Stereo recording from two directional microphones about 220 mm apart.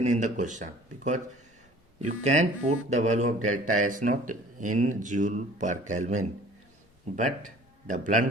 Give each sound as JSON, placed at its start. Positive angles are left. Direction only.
{"t": 0.0, "sound": "speech", "side_deg": -35}
{"t": 7.4, "sound": "a man's voice", "side_deg": -35}